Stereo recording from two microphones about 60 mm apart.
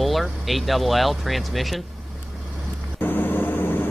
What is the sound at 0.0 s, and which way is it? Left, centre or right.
Speech, centre.